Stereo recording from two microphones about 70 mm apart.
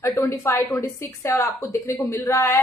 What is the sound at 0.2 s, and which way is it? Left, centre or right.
A woman's voice, left.